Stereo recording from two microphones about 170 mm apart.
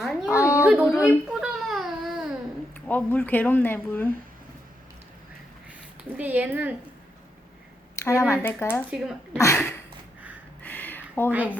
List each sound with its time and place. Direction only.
0.3 s a sound: 15° left (ahead or behind)
0.6 s yodeling: 10° right (ahead or behind)
0.9 s baby cry: 5° right (ahead or behind)
2.7 s speech: 10° left (ahead or behind)
6.1 s speech: 10° right (ahead or behind)
7.9 s speech: 15° left (ahead or behind)
8.9 s speech: 10° right (ahead or behind)
9.4 s a sound: 15° left (ahead or behind)
11.3 s speech: 10° right (ahead or behind)